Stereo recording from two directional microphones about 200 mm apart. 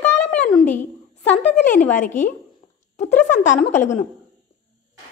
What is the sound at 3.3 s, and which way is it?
Speech, 40° left (ahead or behind).